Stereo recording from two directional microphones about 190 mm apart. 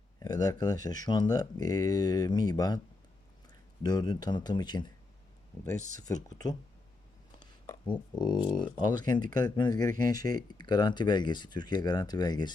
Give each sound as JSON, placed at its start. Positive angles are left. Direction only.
{"t": 0.2, "sound": "speech", "side_deg": 20}
{"t": 3.8, "sound": "speech", "side_deg": 20}
{"t": 6.0, "sound": "speech", "side_deg": 20}
{"t": 8.1, "sound": "speech", "side_deg": 25}